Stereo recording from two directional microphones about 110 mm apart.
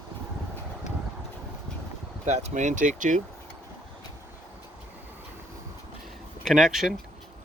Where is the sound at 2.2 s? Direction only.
90° right.